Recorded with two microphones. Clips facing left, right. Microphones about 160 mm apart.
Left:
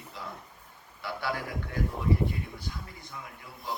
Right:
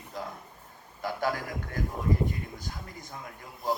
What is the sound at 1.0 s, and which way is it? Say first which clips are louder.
Music: right 3 dB; 45° right (ahead or behind).